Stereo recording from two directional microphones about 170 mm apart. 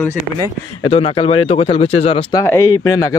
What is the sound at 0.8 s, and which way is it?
Speech, 35° left (ahead or behind).